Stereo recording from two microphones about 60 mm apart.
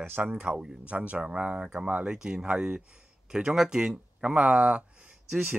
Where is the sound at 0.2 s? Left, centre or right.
Right.